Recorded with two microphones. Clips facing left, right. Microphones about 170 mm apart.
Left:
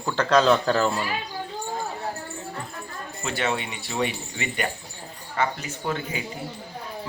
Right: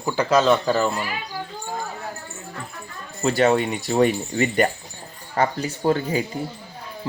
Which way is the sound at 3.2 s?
40° right (ahead or behind).